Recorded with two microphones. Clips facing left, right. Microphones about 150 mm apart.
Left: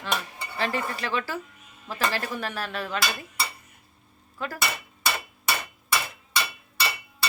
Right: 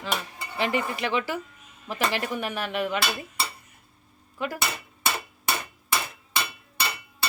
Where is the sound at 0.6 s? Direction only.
15° right (ahead or behind).